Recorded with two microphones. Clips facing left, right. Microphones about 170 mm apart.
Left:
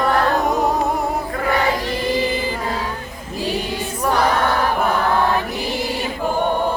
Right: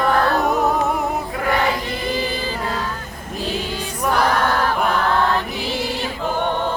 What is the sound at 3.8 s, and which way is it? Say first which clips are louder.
Choir: even; centre (ahead or behind).